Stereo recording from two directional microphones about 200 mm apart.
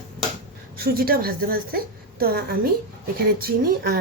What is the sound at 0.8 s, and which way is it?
A woman's voice, 50° right (ahead or behind).